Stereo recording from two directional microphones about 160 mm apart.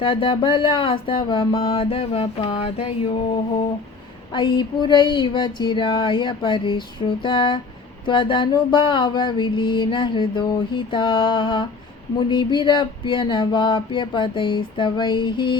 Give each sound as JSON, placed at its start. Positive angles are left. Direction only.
{"t": 0.0, "sound": "mantra", "side_deg": 35}
{"t": 4.4, "sound": "mantra", "side_deg": 30}
{"t": 12.3, "sound": "a sound", "side_deg": 30}